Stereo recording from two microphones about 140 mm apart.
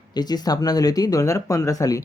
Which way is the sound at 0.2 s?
30° left (ahead or behind).